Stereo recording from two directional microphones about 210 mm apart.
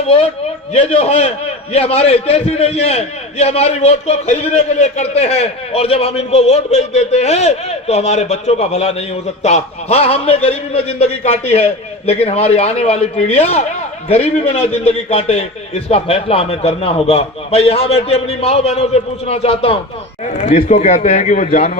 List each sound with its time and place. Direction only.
0.7 s a man's voice: 30° left (ahead or behind)